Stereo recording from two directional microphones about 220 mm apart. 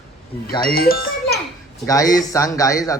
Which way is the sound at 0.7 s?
45° left (ahead or behind).